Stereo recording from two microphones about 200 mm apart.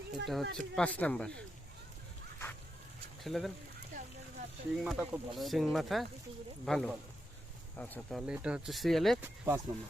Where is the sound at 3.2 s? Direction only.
Centre (ahead or behind).